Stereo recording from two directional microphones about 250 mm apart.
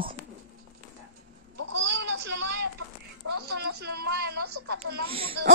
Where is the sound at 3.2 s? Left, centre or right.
Right.